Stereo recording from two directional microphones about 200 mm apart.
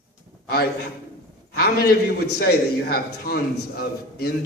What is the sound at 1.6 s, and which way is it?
A man's voice, 50° left (ahead or behind).